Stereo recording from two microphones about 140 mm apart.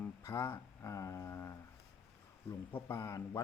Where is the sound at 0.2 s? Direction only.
20° left (ahead or behind).